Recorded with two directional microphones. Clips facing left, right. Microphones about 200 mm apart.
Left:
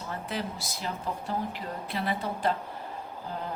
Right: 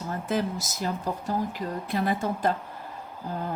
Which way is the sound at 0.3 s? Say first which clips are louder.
Right 9 dB; 45° right (ahead or behind).